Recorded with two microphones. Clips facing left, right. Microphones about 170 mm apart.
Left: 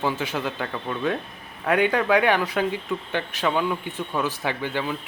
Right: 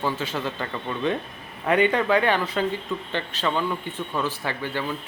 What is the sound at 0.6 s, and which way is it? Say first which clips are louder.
Speech: even; centre (ahead or behind).